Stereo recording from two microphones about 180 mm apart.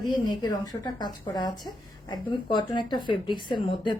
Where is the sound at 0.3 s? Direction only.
20° left (ahead or behind).